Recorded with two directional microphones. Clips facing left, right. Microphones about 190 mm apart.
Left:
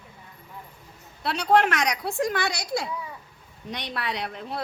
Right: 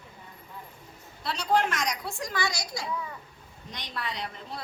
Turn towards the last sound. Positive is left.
turn(degrees=65)  # may be behind; listen again after turning